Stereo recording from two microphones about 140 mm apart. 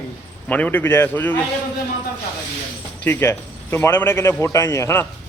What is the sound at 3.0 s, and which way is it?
A man's voice, 15° left (ahead or behind).